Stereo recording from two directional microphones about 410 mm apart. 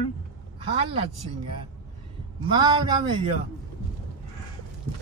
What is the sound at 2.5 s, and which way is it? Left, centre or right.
Speech, centre.